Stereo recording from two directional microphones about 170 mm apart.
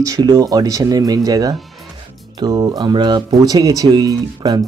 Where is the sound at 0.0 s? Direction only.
20° right (ahead or behind).